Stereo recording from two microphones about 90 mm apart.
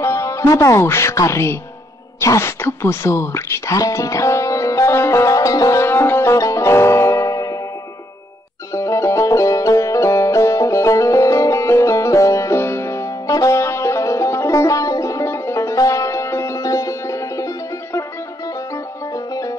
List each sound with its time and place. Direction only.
0.0 s music: 35° left (ahead or behind)
0.8 s speech: 30° left (ahead or behind)
2.1 s a sound: 30° left (ahead or behind)
8.7 s music: 35° left (ahead or behind)
19.1 s music: 40° left (ahead or behind)